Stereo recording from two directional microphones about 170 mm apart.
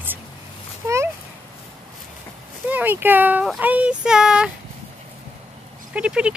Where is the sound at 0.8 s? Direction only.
20° right (ahead or behind).